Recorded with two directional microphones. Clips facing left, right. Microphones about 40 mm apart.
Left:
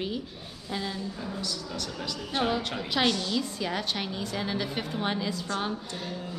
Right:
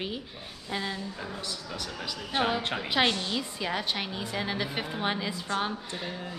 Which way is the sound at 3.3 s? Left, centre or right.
Centre.